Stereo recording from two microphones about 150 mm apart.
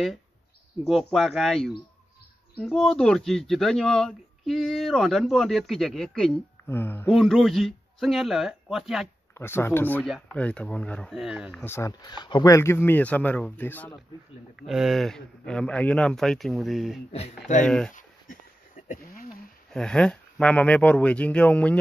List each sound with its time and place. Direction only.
0.8 s a man's voice: centre (ahead or behind)
6.7 s speech: 15° left (ahead or behind)
7.1 s a man's voice: centre (ahead or behind)
9.3 s speech: 15° left (ahead or behind)
11.1 s a man's voice: 5° right (ahead or behind)
11.6 s speech: 20° left (ahead or behind)
14.6 s a man's voice: centre (ahead or behind)
19.7 s speech: 5° left (ahead or behind)